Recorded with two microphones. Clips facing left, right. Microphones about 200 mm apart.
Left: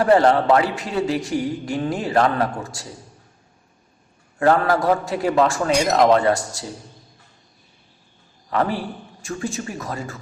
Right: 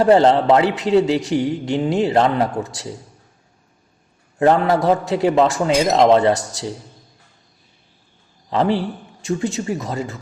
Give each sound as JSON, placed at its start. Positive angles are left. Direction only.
{"t": 0.0, "sound": "speech", "side_deg": -25}
{"t": 4.4, "sound": "speech", "side_deg": -20}
{"t": 8.4, "sound": "speech", "side_deg": -25}